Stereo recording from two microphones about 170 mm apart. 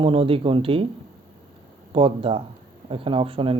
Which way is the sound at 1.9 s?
35° right (ahead or behind).